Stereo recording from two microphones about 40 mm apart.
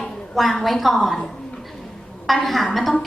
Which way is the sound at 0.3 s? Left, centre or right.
Centre.